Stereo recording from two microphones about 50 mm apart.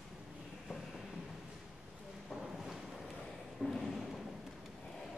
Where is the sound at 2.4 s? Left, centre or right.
Centre.